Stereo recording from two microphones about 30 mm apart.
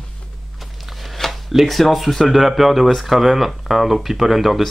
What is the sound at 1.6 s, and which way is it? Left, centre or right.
Speech, centre.